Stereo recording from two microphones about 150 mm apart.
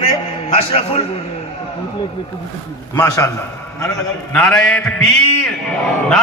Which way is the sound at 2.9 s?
20° left (ahead or behind).